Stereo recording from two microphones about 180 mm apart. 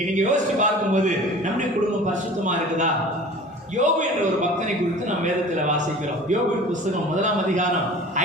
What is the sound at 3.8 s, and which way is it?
A man's voice, 40° right (ahead or behind).